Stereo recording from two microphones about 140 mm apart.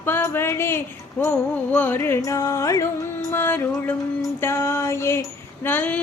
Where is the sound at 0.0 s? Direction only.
15° left (ahead or behind).